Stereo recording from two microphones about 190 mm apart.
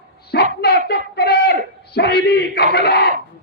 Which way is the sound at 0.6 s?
55° left (ahead or behind).